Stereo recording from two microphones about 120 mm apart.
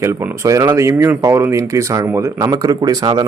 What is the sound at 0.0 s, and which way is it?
A man's voice, 25° right (ahead or behind).